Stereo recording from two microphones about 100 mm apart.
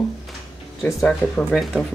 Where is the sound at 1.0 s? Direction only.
5° left (ahead or behind).